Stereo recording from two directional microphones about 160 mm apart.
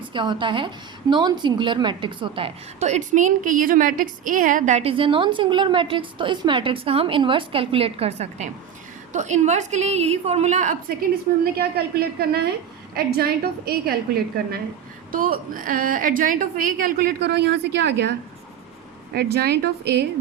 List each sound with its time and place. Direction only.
0.1 s a woman's voice: 30° right (ahead or behind); by 10.9 s 50° right (ahead or behind)
11.5 s a woman's voice: 75° right (ahead or behind)
15.1 s a woman's voice: 60° right (ahead or behind); by 18.1 s 90° right
19.1 s a woman's voice: 90° right